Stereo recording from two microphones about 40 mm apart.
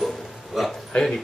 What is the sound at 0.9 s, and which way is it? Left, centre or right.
Speech, left.